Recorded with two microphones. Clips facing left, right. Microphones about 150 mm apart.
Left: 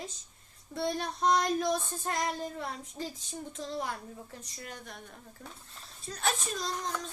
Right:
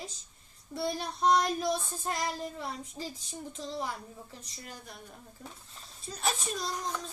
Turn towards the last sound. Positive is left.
turn(degrees=-5)  # may be behind; listen again after turning